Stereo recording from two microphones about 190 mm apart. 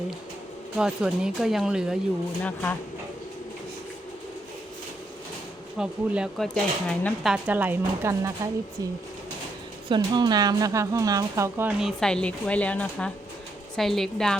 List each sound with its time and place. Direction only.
0.8 s speech: 5° right (ahead or behind)
2.4 s speech: 10° left (ahead or behind)
5.7 s speech: 5° right (ahead or behind)
7.4 s speech: 10° right (ahead or behind)
9.9 s speech: 20° right (ahead or behind)
11.8 s speech: centre (ahead or behind)